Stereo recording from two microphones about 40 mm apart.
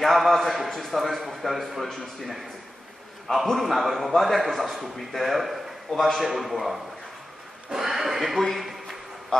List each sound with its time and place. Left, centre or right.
0.0 s a man's voice: centre
3.4 s a man's voice: centre
9.3 s speech: centre